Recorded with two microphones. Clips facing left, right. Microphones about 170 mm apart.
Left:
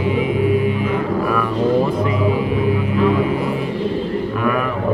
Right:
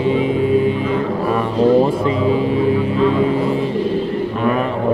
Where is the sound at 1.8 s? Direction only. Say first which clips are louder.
Right 2 dB; 30° right (ahead or behind).